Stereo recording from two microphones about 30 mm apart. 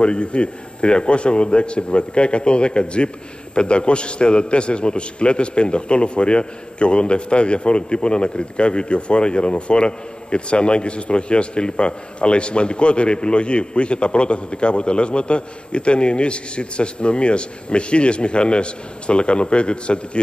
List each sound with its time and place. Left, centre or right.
0.0 s a man's voice: left